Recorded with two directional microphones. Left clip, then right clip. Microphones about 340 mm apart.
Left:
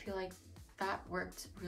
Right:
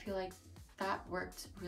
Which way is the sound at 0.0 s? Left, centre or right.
Centre.